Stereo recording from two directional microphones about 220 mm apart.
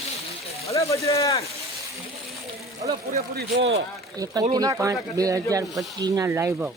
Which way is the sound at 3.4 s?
55° right (ahead or behind).